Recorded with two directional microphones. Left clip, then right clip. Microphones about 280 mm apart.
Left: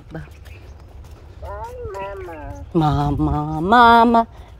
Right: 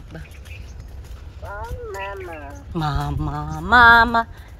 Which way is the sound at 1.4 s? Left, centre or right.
Left.